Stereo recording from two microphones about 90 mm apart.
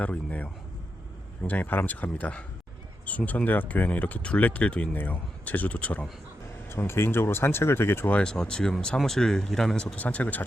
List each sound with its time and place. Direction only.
0.0 s speech: 15° left (ahead or behind)
6.7 s speech: 25° left (ahead or behind)
8.1 s speech: 10° left (ahead or behind)